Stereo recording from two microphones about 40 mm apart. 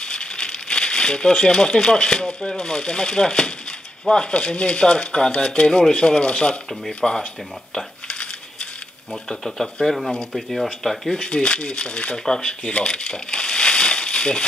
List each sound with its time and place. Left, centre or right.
0.0 s speech: left
7.0 s speech: centre
9.1 s speech: centre
11.2 s speech: left
12.7 s crumpling: centre